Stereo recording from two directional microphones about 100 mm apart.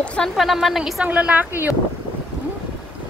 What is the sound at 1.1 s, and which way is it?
Speech, 15° right (ahead or behind).